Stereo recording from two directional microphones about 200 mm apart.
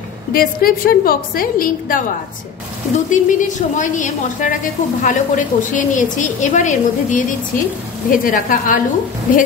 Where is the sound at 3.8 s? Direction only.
40° left (ahead or behind).